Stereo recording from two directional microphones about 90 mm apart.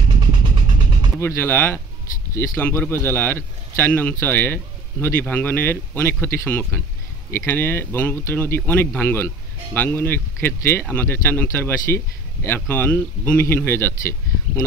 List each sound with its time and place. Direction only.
0.2 s vehicle: 60° right (ahead or behind)
1.2 s speech: 25° left (ahead or behind)